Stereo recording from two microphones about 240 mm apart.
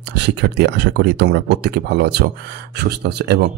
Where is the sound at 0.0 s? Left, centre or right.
Right.